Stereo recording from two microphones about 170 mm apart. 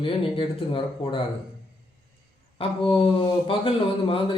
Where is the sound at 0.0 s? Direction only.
30° left (ahead or behind).